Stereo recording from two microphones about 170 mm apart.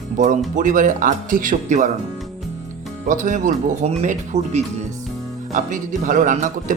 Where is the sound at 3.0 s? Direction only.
50° right (ahead or behind).